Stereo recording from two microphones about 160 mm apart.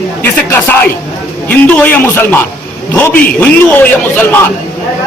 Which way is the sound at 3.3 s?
10° left (ahead or behind).